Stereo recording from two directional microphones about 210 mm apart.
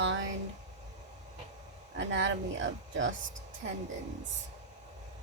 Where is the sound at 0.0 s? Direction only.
65° right (ahead or behind).